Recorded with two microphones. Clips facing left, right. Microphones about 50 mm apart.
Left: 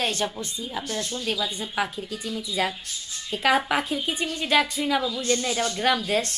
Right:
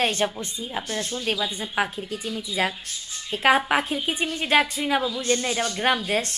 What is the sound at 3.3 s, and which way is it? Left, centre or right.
A woman's voice, right.